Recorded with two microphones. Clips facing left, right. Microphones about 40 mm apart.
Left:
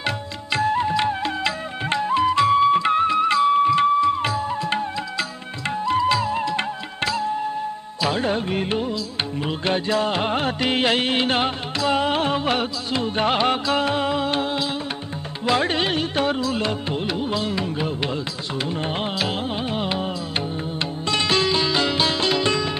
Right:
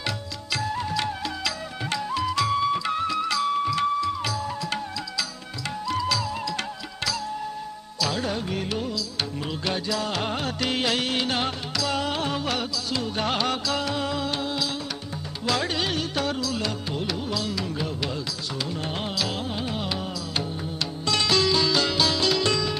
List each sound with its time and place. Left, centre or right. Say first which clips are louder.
0.0 s music: left 5 dB; left
5.9 s music: left 7 dB; left
8.0 s music of bollywood: left 5 dB; left
9.7 s music: left 6 dB; left